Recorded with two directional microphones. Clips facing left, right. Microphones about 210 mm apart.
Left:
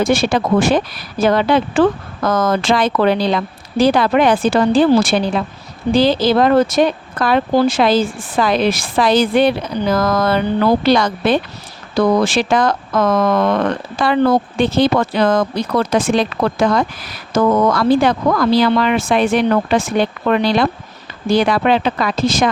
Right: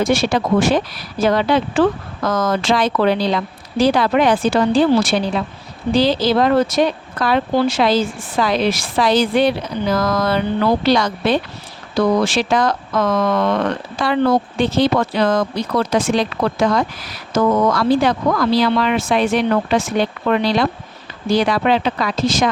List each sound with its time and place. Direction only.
0.0 s speech: 50° left (ahead or behind)